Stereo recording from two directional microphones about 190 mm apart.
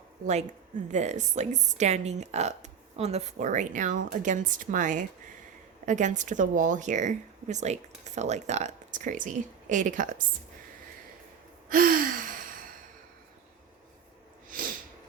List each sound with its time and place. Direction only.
0.9 s speech: 40° right (ahead or behind)
11.7 s gasp: 50° right (ahead or behind)